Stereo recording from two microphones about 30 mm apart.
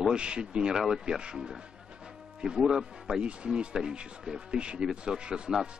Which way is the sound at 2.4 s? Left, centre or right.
Right.